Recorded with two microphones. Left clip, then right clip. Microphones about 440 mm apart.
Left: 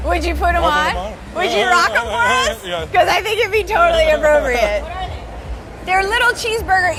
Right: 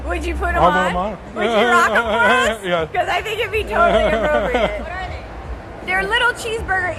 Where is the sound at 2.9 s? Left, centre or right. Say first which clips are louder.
Left 6 dB; left.